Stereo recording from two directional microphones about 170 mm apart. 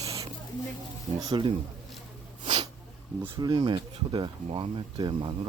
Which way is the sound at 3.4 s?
25° right (ahead or behind).